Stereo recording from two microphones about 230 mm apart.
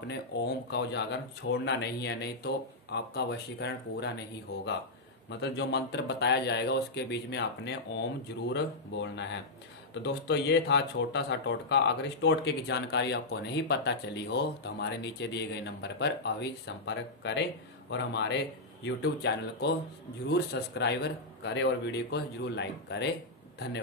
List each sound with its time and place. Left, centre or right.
0.1 s speech: left
5.4 s speech: left